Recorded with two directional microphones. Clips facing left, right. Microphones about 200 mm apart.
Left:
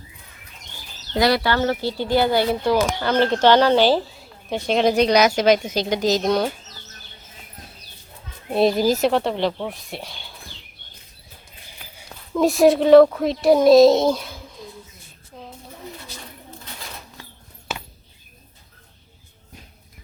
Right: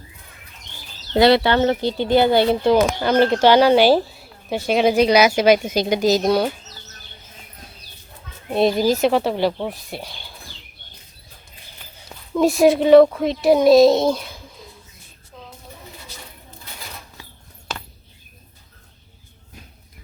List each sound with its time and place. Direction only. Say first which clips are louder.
1.1 s speech: right 5 dB; 25° right (ahead or behind); by 6.5 s 5° right (ahead or behind)
8.5 s speech: even; centre (ahead or behind)
12.0 s a child's voice: right 1 dB; centre (ahead or behind)